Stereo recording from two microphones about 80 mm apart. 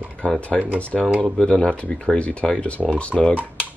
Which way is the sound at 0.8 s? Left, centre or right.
Centre.